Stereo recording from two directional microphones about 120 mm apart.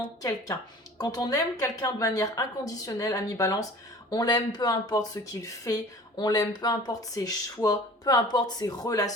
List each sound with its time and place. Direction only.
0.2 s a woman's voice: 30° left (ahead or behind)